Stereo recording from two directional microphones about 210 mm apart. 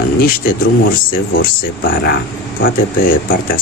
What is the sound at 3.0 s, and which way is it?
Speech, 40° left (ahead or behind).